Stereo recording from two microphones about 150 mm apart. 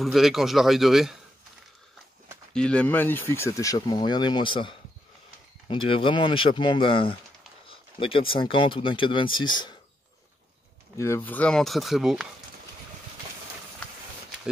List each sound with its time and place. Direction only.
0.0 s speech: centre (ahead or behind)
2.5 s speech: 5° left (ahead or behind); by 9.8 s 30° left (ahead or behind)
11.0 s speech: 15° left (ahead or behind); by 12.3 s centre (ahead or behind)